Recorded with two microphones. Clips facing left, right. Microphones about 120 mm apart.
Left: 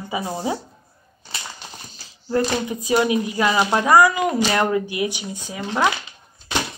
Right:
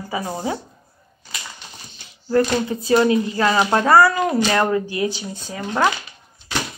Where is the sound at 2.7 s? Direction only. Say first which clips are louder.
Right 3 dB; 15° left (ahead or behind).